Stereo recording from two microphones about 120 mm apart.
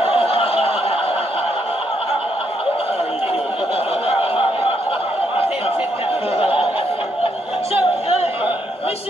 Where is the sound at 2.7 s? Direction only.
55° left (ahead or behind).